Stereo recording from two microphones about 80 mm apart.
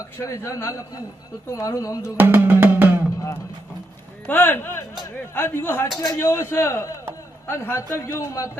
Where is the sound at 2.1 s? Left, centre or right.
Right.